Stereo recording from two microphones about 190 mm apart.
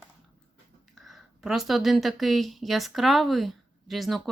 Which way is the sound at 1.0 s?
Centre (ahead or behind).